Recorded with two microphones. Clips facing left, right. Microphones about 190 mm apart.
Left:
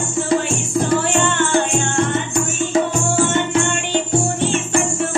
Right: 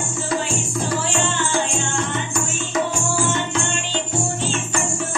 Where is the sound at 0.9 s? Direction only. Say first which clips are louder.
Left 5 dB; 60° left (ahead or behind).